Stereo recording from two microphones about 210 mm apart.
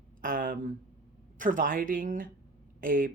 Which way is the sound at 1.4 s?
40° right (ahead or behind).